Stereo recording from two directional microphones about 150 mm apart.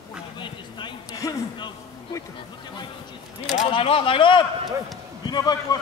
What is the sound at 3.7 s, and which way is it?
Speech, 35° left (ahead or behind).